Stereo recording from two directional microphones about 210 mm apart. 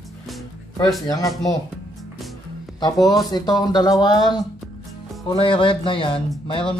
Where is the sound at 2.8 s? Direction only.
15° left (ahead or behind).